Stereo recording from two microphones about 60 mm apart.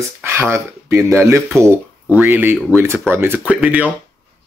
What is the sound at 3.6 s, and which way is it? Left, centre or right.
Speech, right.